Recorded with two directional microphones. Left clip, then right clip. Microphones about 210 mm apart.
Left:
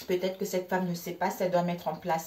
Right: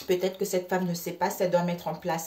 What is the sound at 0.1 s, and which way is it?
Speech, 50° right (ahead or behind).